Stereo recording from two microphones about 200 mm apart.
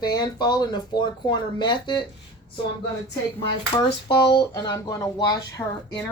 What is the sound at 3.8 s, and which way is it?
Speech, 20° left (ahead or behind).